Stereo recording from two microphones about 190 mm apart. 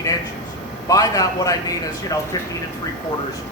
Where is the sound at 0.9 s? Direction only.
20° left (ahead or behind).